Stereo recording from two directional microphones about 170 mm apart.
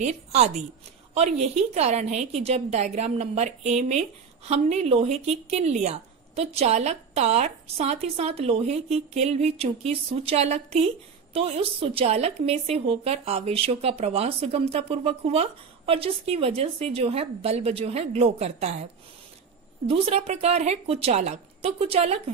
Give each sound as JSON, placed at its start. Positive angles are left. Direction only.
{"t": 0.0, "sound": "a woman's voice", "side_deg": -40}
{"t": 19.9, "sound": "a woman's voice", "side_deg": -40}